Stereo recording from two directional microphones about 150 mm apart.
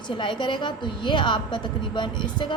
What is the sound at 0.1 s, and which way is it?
Speech, 35° left (ahead or behind).